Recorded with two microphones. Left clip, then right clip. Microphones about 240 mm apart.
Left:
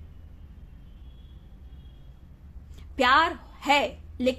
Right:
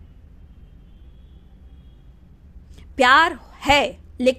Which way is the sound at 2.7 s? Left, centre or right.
Right.